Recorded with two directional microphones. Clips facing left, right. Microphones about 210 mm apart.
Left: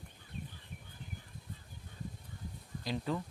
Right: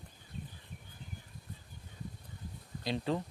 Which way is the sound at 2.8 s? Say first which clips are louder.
Right 2 dB; 25° right (ahead or behind).